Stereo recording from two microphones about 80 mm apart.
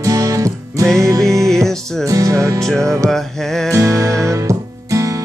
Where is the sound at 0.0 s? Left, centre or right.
Right.